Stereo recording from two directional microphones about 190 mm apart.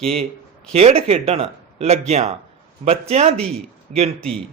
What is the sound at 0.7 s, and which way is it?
Speech, 30° right (ahead or behind).